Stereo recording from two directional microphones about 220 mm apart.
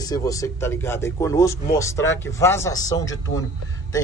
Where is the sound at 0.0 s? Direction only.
15° left (ahead or behind).